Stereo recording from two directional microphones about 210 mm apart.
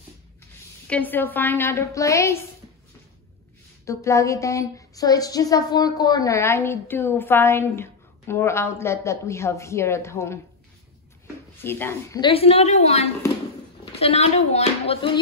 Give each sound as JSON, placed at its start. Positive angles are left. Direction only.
{"t": 0.8, "sound": "a woman's voice", "side_deg": 5}
{"t": 3.8, "sound": "a woman's voice", "side_deg": 15}
{"t": 11.6, "sound": "a woman's voice", "side_deg": 10}
{"t": 12.2, "sound": "a woman's voice", "side_deg": 25}